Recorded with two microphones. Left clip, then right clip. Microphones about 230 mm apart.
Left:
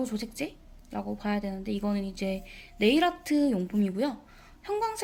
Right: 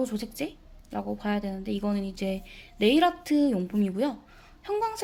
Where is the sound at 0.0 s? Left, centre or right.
Centre.